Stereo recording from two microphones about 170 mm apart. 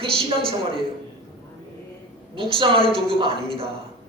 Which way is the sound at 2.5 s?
30° right (ahead or behind).